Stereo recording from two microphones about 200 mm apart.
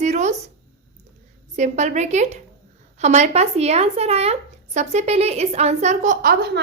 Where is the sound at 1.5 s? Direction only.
35° right (ahead or behind).